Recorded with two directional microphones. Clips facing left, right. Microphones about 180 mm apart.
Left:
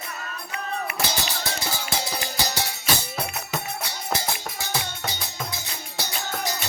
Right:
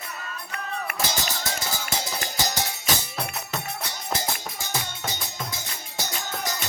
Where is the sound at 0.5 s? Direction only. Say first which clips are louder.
Left 2 dB; 50° right (ahead or behind).